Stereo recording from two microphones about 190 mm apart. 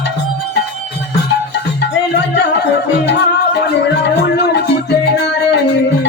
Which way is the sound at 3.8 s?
65° left (ahead or behind).